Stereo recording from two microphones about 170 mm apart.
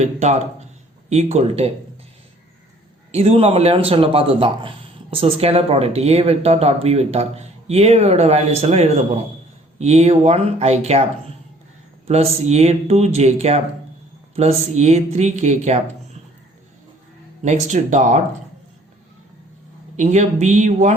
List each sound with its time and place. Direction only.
0.0 s speech: 45° right (ahead or behind)
3.1 s speech: 35° right (ahead or behind)
12.0 s speech: 40° right (ahead or behind)
17.4 s speech: 45° right (ahead or behind)
20.0 s speech: 45° right (ahead or behind)